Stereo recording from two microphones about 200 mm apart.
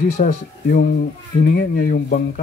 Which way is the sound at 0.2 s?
45° left (ahead or behind).